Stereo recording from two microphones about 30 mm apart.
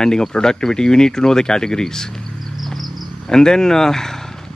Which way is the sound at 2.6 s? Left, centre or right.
Centre.